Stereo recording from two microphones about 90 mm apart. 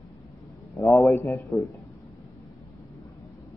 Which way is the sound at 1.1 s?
35° left (ahead or behind).